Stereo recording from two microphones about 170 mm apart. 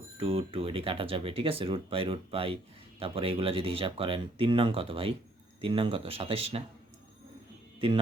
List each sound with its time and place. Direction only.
0.2 s speech: 35° right (ahead or behind)